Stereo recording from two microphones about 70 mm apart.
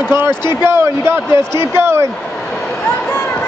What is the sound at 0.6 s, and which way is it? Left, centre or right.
A man's voice, right.